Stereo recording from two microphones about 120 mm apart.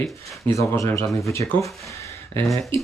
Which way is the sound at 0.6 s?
25° left (ahead or behind).